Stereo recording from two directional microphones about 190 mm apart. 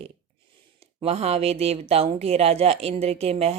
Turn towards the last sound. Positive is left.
turn(degrees=-30)  # may be behind; listen again after turning